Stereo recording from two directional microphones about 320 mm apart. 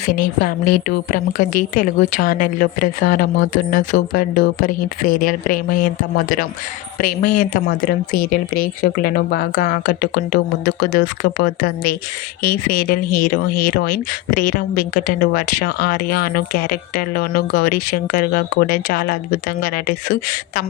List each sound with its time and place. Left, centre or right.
0.1 s a woman's voice: left